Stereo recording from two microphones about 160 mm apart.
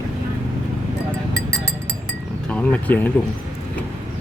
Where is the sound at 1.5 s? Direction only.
20° right (ahead or behind).